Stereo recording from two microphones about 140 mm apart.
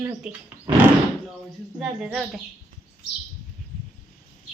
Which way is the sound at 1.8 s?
5° right (ahead or behind).